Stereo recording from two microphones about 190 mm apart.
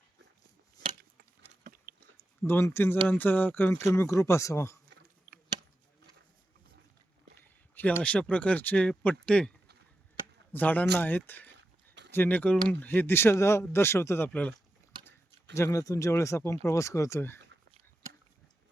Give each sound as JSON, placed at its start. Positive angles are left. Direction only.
{"t": 1.5, "sound": "biting", "side_deg": -45}
{"t": 2.4, "sound": "speech", "side_deg": 10}
{"t": 7.8, "sound": "speech", "side_deg": 10}
{"t": 10.5, "sound": "speech", "side_deg": 10}
{"t": 15.5, "sound": "speech", "side_deg": 15}